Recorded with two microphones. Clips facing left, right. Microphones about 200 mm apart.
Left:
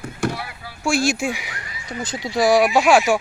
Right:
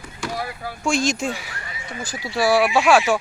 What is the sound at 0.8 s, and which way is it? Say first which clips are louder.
Speech: left 2 dB; 10° left (ahead or behind).